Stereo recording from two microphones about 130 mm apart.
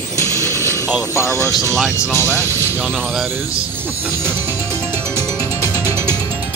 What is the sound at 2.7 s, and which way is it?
Speech, 15° right (ahead or behind).